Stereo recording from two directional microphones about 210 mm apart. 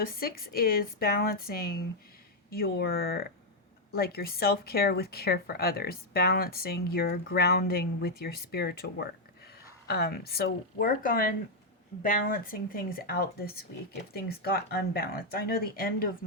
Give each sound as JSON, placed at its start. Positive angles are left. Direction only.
{"t": 0.0, "sound": "a woman's voice", "side_deg": 45}